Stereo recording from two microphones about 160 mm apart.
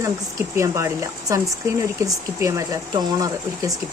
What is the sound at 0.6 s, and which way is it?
Speech, 15° right (ahead or behind).